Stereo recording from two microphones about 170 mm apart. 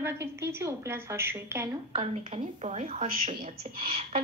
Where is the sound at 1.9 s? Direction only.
35° right (ahead or behind).